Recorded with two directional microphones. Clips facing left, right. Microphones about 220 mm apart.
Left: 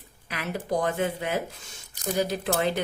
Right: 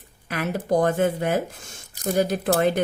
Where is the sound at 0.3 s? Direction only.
50° right (ahead or behind).